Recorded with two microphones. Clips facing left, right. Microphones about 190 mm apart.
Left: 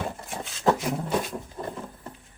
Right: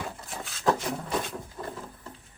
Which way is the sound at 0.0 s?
25° left (ahead or behind).